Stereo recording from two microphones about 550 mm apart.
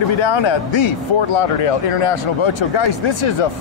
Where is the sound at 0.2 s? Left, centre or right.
Left.